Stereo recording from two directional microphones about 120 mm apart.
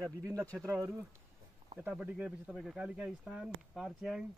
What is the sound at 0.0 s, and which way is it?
Speech, 30° right (ahead or behind).